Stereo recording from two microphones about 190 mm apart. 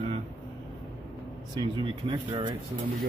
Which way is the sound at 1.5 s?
25° right (ahead or behind).